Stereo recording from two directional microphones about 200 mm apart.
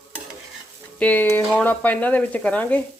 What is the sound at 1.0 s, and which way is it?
Speech, 10° left (ahead or behind).